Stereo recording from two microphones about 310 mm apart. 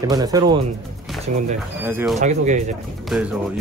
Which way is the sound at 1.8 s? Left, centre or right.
Centre.